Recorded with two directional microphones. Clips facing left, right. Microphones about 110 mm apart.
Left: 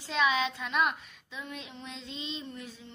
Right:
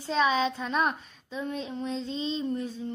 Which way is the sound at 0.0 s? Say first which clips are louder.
Right 3 dB; 35° right (ahead or behind).